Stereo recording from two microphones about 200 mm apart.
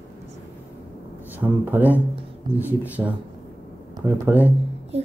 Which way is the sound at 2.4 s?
20° right (ahead or behind).